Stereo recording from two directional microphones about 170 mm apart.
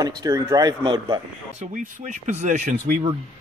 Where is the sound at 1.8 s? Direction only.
45° right (ahead or behind).